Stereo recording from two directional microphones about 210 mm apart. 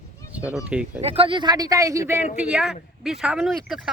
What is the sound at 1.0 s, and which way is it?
A man's voice, 25° right (ahead or behind).